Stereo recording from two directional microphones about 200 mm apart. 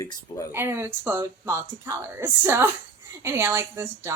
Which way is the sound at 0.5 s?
10° right (ahead or behind).